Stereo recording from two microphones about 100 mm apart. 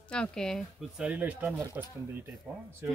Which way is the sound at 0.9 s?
10° right (ahead or behind).